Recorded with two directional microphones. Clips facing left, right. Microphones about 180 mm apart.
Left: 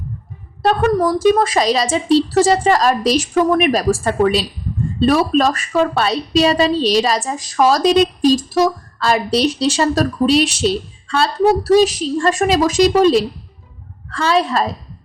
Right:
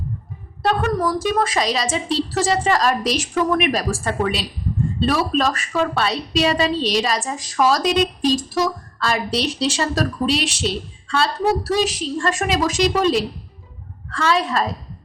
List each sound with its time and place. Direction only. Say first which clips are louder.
0.6 s a woman's voice: left 5 dB; 40° left (ahead or behind)